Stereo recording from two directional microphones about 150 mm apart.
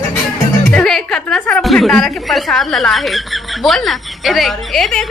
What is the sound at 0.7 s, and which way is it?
A woman's voice, 5° left (ahead or behind).